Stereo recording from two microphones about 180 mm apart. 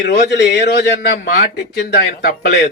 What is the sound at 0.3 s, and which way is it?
A man's voice, 70° left (ahead or behind).